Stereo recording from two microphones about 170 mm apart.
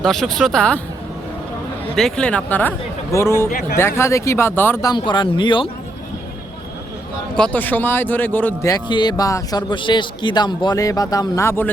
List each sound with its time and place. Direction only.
0.0 s speech: centre (ahead or behind)
2.0 s speech: 5° left (ahead or behind)
4.9 s speech: 30° left (ahead or behind)
7.3 s speech: 10° left (ahead or behind)
8.7 s speech: 25° left (ahead or behind)